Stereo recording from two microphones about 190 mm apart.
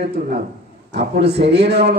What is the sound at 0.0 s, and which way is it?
A man's voice, 60° right (ahead or behind).